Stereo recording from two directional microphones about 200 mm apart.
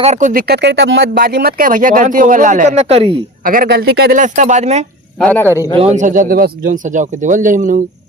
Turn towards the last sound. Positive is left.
turn(degrees=-40)  # may be behind; listen again after turning